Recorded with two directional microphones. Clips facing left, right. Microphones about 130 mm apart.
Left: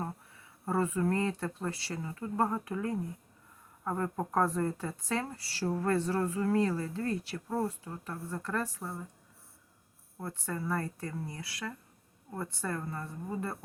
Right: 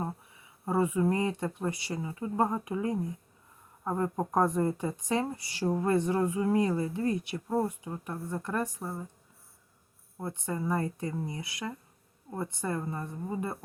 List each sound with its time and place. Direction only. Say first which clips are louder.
0.0 s speech: right 3 dB; 15° right (ahead or behind)
10.2 s speech: right 3 dB; 20° right (ahead or behind)